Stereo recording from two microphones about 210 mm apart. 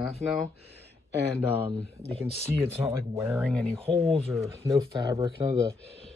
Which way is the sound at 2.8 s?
15° right (ahead or behind).